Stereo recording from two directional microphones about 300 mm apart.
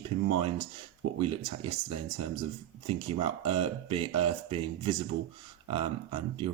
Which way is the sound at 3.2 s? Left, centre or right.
Centre.